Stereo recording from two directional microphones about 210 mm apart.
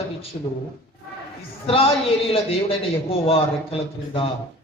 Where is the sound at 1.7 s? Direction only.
25° left (ahead or behind).